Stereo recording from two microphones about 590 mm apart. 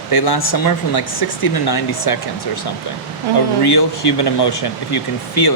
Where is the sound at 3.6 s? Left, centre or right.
Left.